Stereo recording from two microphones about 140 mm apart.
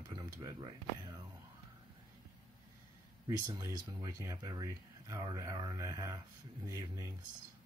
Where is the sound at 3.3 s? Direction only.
25° right (ahead or behind).